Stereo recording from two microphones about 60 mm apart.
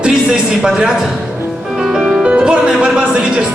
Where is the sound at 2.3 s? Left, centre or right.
Centre.